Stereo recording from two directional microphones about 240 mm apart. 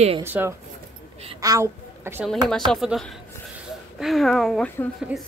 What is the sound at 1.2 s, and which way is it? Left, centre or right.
A woman's voice, centre.